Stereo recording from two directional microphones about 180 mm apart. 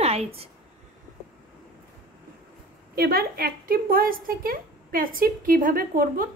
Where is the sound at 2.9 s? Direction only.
55° right (ahead or behind).